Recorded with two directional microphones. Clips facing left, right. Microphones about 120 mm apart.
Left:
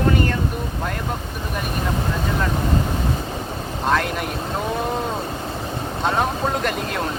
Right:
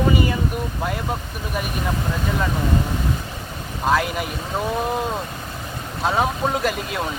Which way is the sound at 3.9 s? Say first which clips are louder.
Right 1 dB; 5° right (ahead or behind).